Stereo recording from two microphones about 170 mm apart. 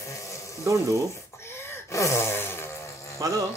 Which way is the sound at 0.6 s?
20° right (ahead or behind).